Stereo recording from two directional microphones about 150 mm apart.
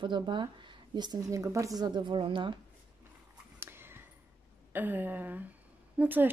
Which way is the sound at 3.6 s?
15° right (ahead or behind).